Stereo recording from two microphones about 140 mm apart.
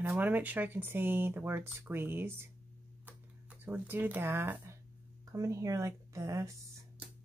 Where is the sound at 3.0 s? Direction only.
15° right (ahead or behind).